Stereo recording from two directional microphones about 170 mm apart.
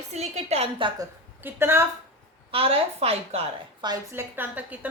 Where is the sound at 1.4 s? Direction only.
15° right (ahead or behind).